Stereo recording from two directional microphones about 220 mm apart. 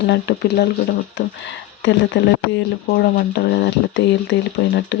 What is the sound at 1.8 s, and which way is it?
Speech, 55° left (ahead or behind).